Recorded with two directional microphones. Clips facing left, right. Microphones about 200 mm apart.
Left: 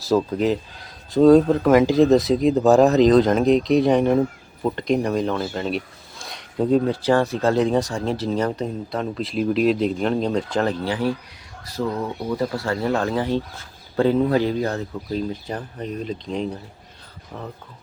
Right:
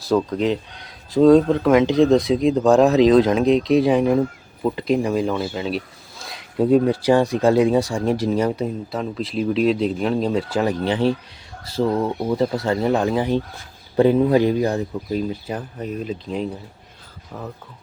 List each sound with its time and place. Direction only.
0.0 s speech: 5° left (ahead or behind)
10.8 s speech: 20° right (ahead or behind); by 16.5 s 5° right (ahead or behind)